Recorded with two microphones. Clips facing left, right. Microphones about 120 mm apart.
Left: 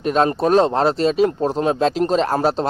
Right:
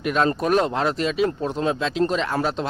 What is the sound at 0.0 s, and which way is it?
Speech, 35° left (ahead or behind).